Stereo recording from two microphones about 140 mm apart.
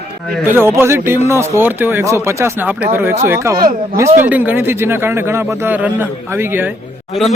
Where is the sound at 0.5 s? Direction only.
20° right (ahead or behind).